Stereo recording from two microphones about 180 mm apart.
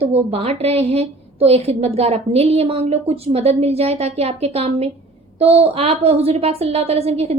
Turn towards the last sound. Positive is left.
turn(degrees=-35)  # may be behind; listen again after turning